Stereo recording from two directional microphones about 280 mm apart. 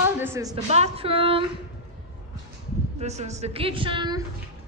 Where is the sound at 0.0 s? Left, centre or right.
Centre.